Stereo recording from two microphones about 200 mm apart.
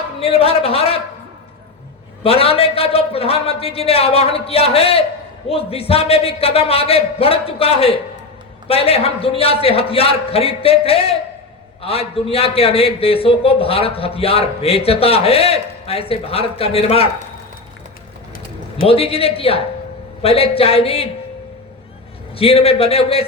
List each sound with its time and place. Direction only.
0.2 s a man's voice: 30° left (ahead or behind)
2.2 s a man's voice: 30° left (ahead or behind)
18.8 s a man's voice: 30° left (ahead or behind)
22.4 s a man's voice: 30° left (ahead or behind)